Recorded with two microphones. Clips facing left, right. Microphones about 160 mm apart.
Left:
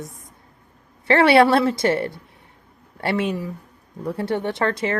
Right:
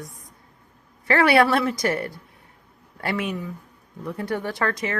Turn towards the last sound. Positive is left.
turn(degrees=30)  # may be behind; listen again after turning